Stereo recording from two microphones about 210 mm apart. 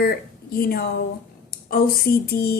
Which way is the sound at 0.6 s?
45° left (ahead or behind).